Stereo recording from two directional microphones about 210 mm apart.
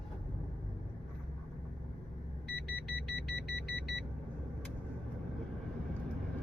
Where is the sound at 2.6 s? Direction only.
50° left (ahead or behind).